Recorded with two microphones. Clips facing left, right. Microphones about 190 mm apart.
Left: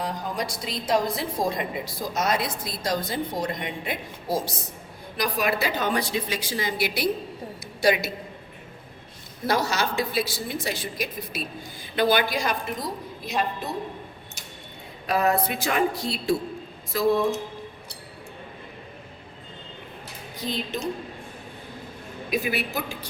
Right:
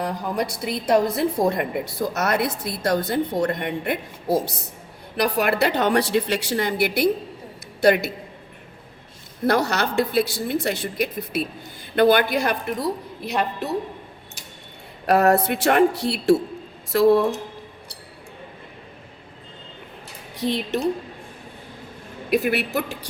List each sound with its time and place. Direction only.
0.0 s a woman's voice: 60° right (ahead or behind)
9.5 s a woman's voice: 60° right (ahead or behind)
15.0 s a woman's voice: 70° right (ahead or behind)
20.3 s speech: 75° right (ahead or behind)
22.3 s a woman's voice: 65° right (ahead or behind)